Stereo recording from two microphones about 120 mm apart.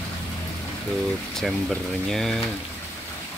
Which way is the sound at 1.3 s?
5° left (ahead or behind).